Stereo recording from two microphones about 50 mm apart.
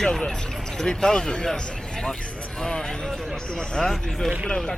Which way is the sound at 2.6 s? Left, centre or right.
Centre.